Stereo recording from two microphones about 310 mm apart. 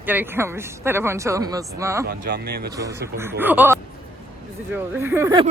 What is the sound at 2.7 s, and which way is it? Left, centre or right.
A man's voice, centre.